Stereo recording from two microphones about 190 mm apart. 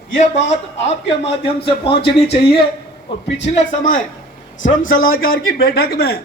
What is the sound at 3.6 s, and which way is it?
A man's voice, 45° left (ahead or behind).